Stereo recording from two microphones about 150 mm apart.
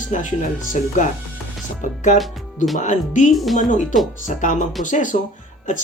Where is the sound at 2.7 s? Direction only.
55° left (ahead or behind).